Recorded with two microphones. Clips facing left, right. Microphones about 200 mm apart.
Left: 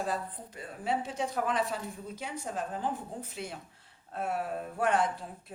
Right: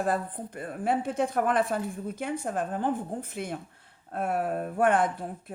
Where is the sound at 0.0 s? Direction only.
55° right (ahead or behind).